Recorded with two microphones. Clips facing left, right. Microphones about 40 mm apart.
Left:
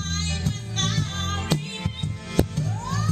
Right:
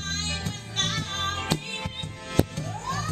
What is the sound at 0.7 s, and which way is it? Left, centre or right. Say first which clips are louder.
Music: even; right.